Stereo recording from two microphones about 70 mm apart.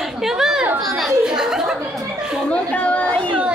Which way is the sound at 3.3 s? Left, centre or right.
Centre.